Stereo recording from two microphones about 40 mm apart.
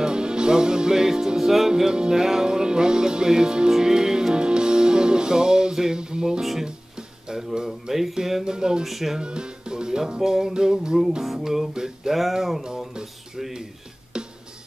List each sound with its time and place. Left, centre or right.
0.0 s music: right
6.6 s speech: centre
7.9 s music: centre
8.8 s speech: centre
9.2 s music: right
12.2 s speech: centre
12.6 s a sound: centre
14.1 s music: right